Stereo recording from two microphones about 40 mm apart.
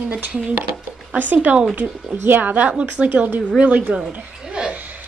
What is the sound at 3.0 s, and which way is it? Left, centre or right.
Speech, right.